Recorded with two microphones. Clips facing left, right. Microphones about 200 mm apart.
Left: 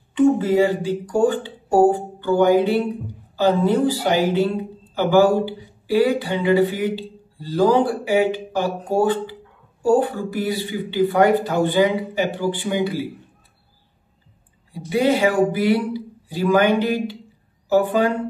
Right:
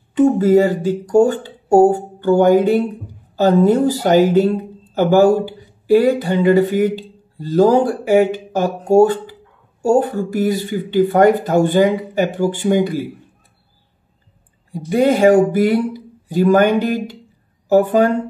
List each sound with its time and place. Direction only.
0.1 s speech: 40° right (ahead or behind)
14.7 s speech: 45° right (ahead or behind)